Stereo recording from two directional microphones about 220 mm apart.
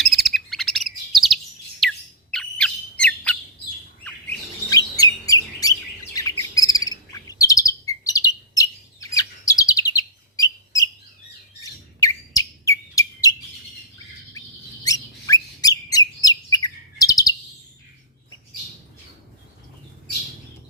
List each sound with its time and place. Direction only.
0.0 s chirp: centre (ahead or behind)
1.8 s squawk: centre (ahead or behind)
2.3 s bird: 5° left (ahead or behind)
5.2 s chirp: 15° left (ahead or behind)
10.3 s bird: 15° left (ahead or behind)
11.6 s chirp: 15° left (ahead or behind)
14.8 s bird: 15° left (ahead or behind)